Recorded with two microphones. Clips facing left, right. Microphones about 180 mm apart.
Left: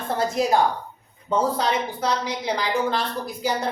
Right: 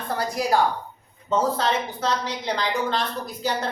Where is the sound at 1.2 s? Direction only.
10° left (ahead or behind).